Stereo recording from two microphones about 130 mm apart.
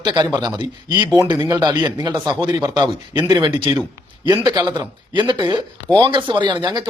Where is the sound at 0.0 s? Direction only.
35° right (ahead or behind).